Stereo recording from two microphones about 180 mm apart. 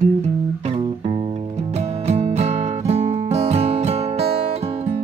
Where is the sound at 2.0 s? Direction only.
35° right (ahead or behind).